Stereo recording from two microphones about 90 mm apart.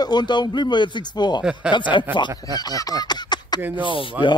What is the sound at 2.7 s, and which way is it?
Speech, 45° left (ahead or behind).